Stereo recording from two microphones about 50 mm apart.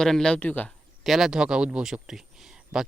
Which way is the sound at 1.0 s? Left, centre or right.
Centre.